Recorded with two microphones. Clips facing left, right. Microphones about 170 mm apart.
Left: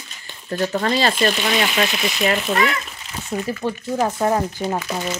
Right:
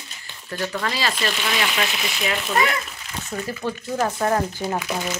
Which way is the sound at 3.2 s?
20° left (ahead or behind).